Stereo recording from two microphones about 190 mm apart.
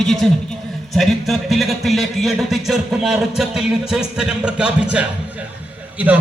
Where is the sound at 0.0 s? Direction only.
Centre (ahead or behind).